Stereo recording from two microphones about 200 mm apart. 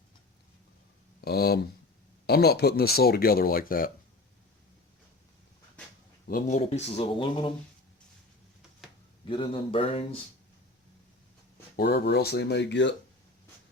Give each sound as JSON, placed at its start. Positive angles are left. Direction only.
{"t": 1.2, "sound": "a sound", "side_deg": 50}
{"t": 2.2, "sound": "speech", "side_deg": 55}
{"t": 6.2, "sound": "speech", "side_deg": 45}
{"t": 6.6, "sound": "speech", "side_deg": 30}
{"t": 9.3, "sound": "speech", "side_deg": 25}
{"t": 11.8, "sound": "speech", "side_deg": 55}